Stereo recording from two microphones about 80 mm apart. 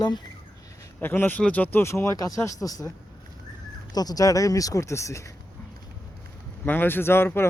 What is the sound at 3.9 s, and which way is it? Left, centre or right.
Speech, left.